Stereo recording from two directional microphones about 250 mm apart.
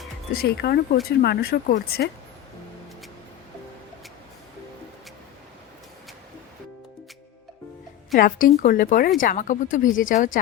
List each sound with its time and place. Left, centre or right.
0.3 s speech: left
8.1 s speech: left